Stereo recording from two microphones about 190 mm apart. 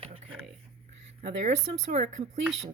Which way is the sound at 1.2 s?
35° right (ahead or behind).